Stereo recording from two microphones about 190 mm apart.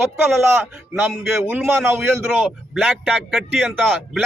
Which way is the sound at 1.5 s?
10° right (ahead or behind).